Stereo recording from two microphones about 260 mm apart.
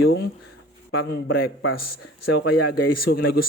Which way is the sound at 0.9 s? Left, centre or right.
Left.